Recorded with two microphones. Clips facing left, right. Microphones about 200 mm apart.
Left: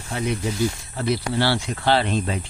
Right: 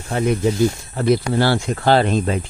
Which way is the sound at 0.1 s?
50° right (ahead or behind).